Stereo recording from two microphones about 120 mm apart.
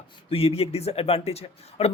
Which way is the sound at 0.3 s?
55° left (ahead or behind).